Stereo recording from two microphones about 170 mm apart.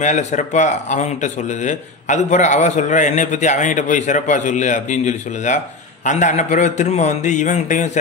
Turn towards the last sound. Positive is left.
turn(degrees=45)  # may be behind; listen again after turning